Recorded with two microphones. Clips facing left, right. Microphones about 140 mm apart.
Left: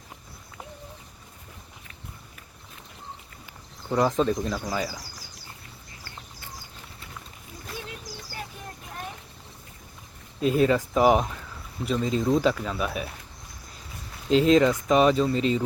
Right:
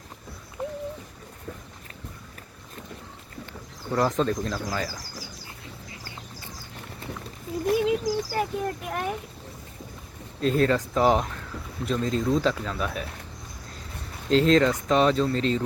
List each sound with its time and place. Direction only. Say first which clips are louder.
3.9 s speech: left 1 dB; 5° left (ahead or behind)
7.7 s a child's voice: right 17 dB; 90° right; by 9.1 s 75° right (ahead or behind)
10.4 s speech: left 1 dB; 10° left (ahead or behind)
14.3 s speech: left 1 dB; 5° left (ahead or behind)